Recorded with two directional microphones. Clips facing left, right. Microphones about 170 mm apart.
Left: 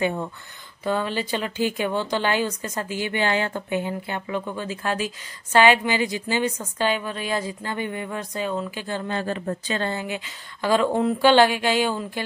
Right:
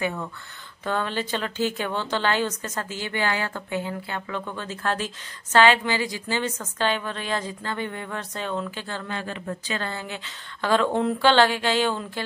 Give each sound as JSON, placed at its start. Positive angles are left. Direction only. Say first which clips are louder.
{"t": 0.0, "sound": "speech", "louder": "left 4 dB", "side_deg": 25}
{"t": 0.8, "sound": "a woman's voice", "louder": "left 2 dB", "side_deg": 10}
{"t": 9.0, "sound": "speech", "louder": "left 7 dB", "side_deg": 40}
{"t": 9.9, "sound": "a woman's voice", "louder": "left 5 dB", "side_deg": 10}